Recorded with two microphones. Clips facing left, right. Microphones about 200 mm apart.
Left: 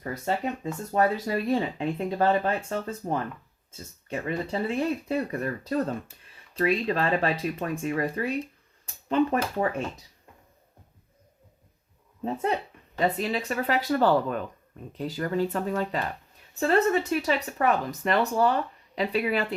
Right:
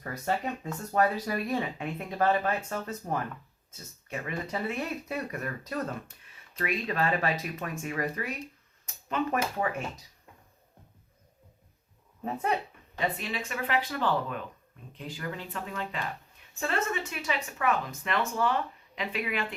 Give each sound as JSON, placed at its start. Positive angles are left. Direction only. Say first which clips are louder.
{"t": 0.0, "sound": "speech", "louder": "left 3 dB", "side_deg": 25}
{"t": 12.2, "sound": "speech", "louder": "left 3 dB", "side_deg": 25}
{"t": 13.0, "sound": "speech", "louder": "left 6 dB", "side_deg": 40}